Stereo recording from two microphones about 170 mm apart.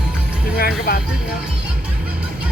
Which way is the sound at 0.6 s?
60° left (ahead or behind).